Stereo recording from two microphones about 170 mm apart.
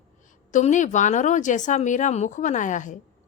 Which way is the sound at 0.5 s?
45° left (ahead or behind).